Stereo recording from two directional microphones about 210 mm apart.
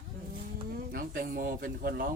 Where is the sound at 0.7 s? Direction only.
45° right (ahead or behind).